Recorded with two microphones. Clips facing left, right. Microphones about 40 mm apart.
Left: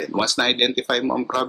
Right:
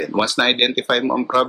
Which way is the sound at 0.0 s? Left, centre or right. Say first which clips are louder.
Right 3 dB; right.